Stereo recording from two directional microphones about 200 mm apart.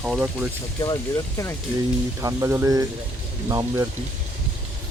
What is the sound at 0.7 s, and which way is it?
Speech, 20° left (ahead or behind).